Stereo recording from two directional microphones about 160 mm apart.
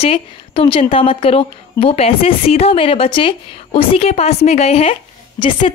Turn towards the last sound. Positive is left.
turn(degrees=35)  # may be behind; listen again after turning